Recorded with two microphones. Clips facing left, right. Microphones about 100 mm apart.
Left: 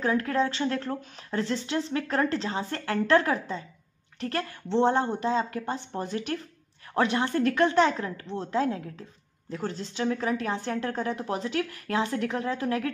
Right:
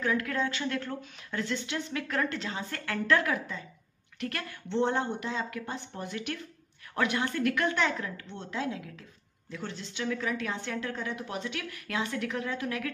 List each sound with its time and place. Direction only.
0.0 s speech: 35° left (ahead or behind)